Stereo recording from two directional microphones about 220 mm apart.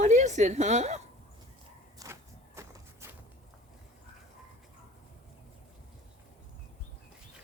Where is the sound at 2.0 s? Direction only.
15° right (ahead or behind).